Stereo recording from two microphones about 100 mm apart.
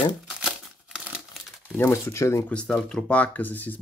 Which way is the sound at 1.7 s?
25° left (ahead or behind).